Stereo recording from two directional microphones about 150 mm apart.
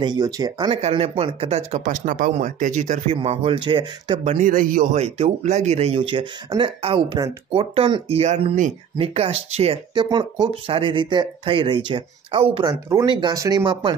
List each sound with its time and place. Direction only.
0.0 s speech: 25° right (ahead or behind)
0.7 s speech: 40° right (ahead or behind)
1.9 s speech: 60° right (ahead or behind)
3.2 s speech: 40° right (ahead or behind)
4.2 s speech: 45° right (ahead or behind)
4.5 s speech: 65° right (ahead or behind)
4.9 s speech: 45° right (ahead or behind)
8.9 s speech: 40° right (ahead or behind)
9.9 s speech: 30° right (ahead or behind)